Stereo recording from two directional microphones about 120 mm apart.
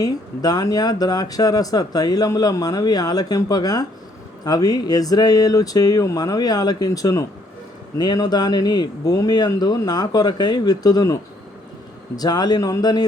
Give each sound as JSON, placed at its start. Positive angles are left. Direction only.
{"t": 0.0, "sound": "speech", "side_deg": 30}